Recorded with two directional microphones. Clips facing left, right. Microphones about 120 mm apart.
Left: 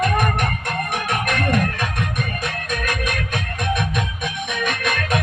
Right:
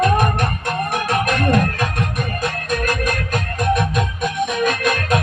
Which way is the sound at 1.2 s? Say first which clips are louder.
Right 2 dB; 35° right (ahead or behind).